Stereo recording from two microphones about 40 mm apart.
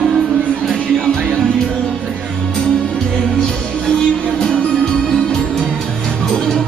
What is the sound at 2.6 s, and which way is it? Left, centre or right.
Music, centre.